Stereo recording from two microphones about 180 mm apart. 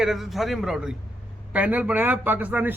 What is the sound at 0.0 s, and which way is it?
A man's voice, centre (ahead or behind).